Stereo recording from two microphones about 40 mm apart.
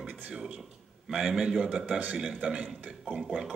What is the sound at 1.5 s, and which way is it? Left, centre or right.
A man's voice, right.